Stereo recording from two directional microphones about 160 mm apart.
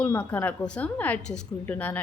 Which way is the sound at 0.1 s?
10° left (ahead or behind).